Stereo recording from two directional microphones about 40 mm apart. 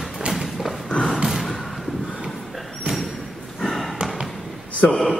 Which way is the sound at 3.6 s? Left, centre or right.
Centre.